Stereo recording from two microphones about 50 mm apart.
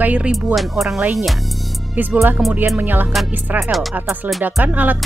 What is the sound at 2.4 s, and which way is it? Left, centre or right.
Speech, centre.